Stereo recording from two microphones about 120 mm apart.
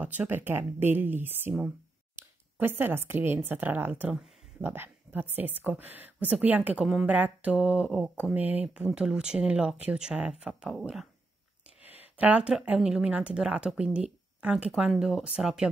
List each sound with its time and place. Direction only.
0.0 s speech: 15° right (ahead or behind)
2.2 s a sound: 20° right (ahead or behind)
2.6 s speech: 15° right (ahead or behind)
11.8 s speech: 15° right (ahead or behind)